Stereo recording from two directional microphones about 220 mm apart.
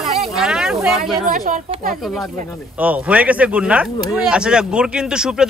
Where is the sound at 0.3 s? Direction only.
Centre (ahead or behind).